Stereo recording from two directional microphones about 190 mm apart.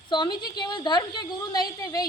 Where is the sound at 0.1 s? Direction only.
25° left (ahead or behind).